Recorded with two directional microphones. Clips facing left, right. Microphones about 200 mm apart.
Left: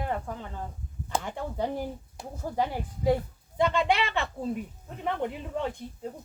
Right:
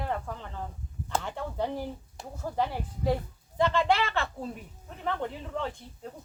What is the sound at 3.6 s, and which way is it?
Speech, 15° left (ahead or behind).